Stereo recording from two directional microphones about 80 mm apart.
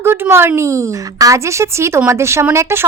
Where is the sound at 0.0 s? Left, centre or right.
Right.